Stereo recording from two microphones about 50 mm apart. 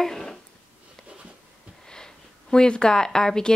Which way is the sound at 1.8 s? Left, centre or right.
Centre.